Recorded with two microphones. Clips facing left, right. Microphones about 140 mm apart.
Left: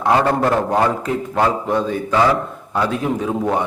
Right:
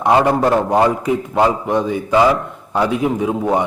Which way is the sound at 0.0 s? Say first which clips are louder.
Right 2 dB; 15° right (ahead or behind).